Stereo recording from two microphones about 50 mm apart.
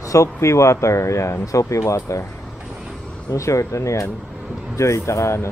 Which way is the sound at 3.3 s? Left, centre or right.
Left.